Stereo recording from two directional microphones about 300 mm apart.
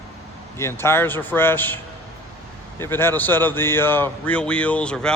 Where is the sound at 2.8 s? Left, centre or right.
Centre.